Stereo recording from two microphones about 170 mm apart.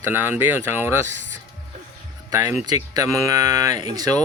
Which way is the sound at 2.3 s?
20° right (ahead or behind).